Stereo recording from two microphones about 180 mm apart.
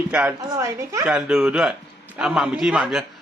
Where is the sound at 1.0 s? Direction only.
5° right (ahead or behind).